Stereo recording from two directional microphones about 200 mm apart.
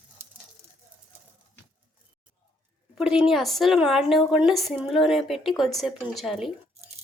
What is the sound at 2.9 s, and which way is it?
A woman's voice, 5° right (ahead or behind).